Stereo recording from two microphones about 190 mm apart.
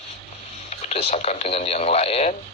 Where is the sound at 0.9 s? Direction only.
35° left (ahead or behind).